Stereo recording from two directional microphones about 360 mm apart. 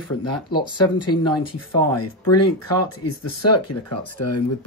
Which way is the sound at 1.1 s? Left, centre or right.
Left.